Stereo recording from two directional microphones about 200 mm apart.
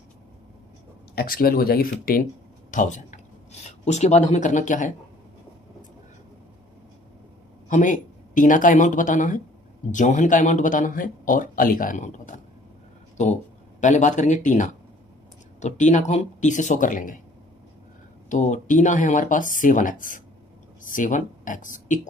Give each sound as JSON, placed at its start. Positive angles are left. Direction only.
{"t": 1.1, "sound": "speech", "side_deg": 45}
{"t": 7.7, "sound": "speech", "side_deg": 40}
{"t": 13.8, "sound": "speech", "side_deg": 40}
{"t": 18.3, "sound": "speech", "side_deg": 35}